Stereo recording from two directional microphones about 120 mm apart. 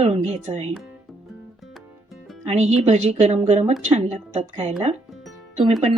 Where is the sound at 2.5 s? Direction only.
70° right (ahead or behind).